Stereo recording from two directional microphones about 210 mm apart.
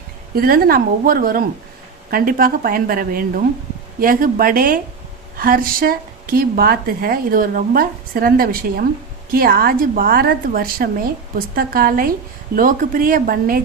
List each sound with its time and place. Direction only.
0.3 s a woman's voice: 45° right (ahead or behind)